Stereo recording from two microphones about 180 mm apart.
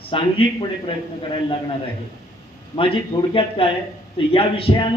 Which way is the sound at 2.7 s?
30° left (ahead or behind).